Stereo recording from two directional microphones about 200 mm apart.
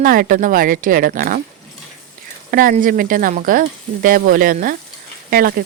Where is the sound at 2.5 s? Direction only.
45° right (ahead or behind).